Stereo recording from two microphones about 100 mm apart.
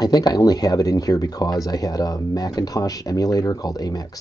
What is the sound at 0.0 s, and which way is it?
Speech, 40° left (ahead or behind).